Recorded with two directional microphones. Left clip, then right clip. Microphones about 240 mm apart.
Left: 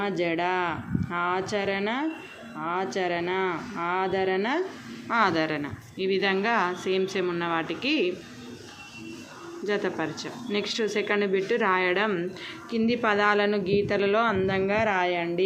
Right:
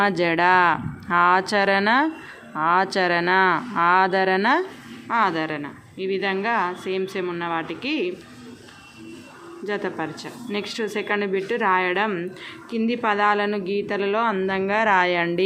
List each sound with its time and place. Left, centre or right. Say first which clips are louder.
0.0 s speech: right 8 dB; right
5.0 s a woman's voice: right 2 dB; centre
9.6 s a woman's voice: right 1 dB; centre; by 15.4 s right